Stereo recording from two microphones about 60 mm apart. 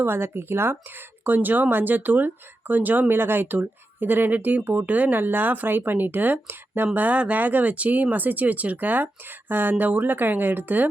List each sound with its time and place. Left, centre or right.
0.0 s speech: right